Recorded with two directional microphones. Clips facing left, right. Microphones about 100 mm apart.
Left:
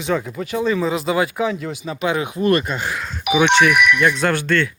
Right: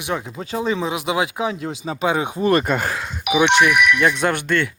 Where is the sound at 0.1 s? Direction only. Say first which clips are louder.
Left 3 dB; 20° right (ahead or behind); by 2.9 s 50° right (ahead or behind).